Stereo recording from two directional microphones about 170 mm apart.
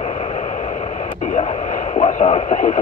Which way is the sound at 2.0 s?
45° left (ahead or behind).